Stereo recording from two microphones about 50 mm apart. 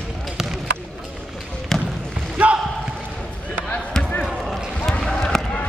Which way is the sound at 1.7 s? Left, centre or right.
Centre.